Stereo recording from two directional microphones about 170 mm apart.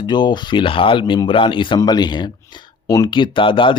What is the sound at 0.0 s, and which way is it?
Speech, 25° left (ahead or behind).